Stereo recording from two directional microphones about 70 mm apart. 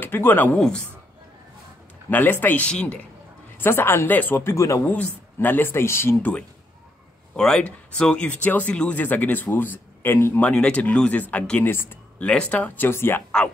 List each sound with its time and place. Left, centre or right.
0.0 s speech: left
0.6 s a man's voice: centre
2.0 s speech: left
2.7 s a man's voice: centre
3.5 s speech: left
4.8 s speech: left
7.3 s speech: centre; by 10.4 s left
10.4 s speech: centre
12.3 s speech: centre; by 13.2 s left